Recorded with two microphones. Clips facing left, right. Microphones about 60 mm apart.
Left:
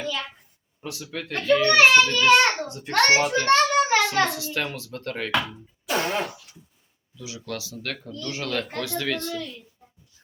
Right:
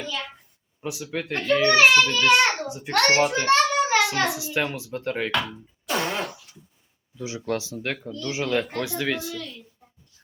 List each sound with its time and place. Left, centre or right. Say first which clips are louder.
0.0 s a child's voice: left 2 dB; centre
0.8 s speech: right 4 dB; centre
1.3 s a child's voice: left 1 dB; centre
5.3 s speech: left 1 dB; centre
7.2 s speech: right 6 dB; right; by 9.4 s centre